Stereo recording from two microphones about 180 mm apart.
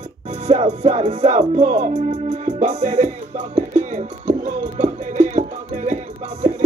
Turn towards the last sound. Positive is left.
turn(degrees=-40)  # may be behind; listen again after turning